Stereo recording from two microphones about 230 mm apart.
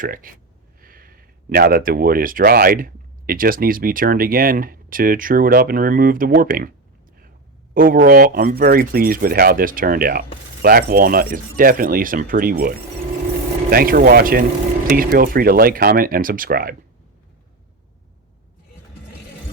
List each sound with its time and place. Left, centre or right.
0.0 s speech: right
7.7 s speech: right